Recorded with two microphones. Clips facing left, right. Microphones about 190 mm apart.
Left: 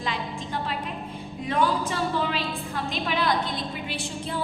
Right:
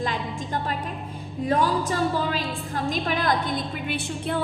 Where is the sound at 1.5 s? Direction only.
40° right (ahead or behind).